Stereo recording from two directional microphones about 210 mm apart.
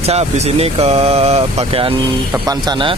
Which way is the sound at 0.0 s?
30° right (ahead or behind).